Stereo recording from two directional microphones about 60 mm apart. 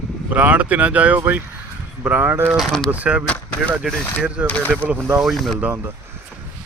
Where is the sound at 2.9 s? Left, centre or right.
Right.